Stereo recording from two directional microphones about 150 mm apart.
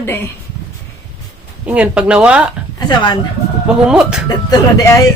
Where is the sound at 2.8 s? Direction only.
30° left (ahead or behind).